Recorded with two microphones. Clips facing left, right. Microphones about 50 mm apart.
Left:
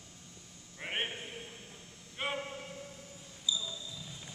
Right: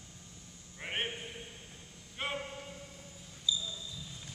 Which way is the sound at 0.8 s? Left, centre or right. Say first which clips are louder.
Even; centre.